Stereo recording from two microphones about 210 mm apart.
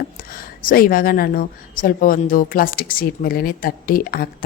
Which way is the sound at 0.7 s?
45° left (ahead or behind).